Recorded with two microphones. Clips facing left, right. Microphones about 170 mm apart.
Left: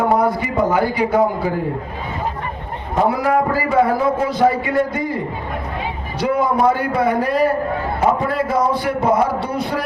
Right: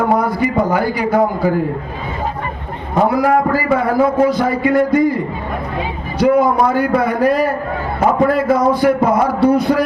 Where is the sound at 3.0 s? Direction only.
25° left (ahead or behind).